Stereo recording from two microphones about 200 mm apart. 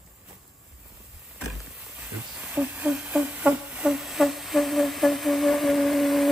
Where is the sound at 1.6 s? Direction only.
Centre (ahead or behind).